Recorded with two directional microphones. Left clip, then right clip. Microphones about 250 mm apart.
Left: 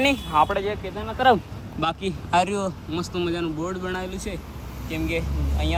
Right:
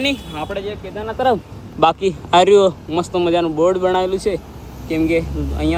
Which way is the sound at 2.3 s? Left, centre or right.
Right.